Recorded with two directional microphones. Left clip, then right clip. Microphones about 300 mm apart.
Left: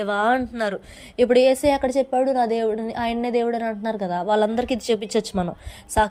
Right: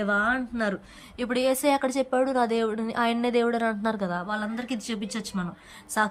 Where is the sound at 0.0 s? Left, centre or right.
Centre.